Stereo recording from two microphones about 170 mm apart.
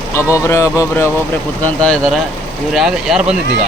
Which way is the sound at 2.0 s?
5° right (ahead or behind).